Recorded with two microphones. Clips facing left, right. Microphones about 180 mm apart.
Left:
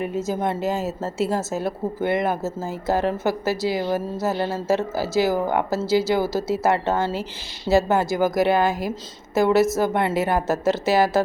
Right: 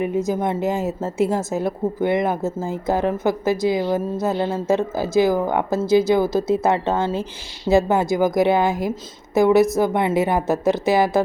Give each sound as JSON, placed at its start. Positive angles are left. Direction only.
{"t": 0.0, "sound": "a woman's voice", "side_deg": -15}